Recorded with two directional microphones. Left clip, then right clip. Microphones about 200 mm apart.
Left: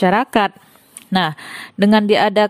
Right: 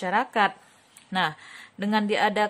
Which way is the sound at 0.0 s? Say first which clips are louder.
Left 8 dB; 50° left (ahead or behind).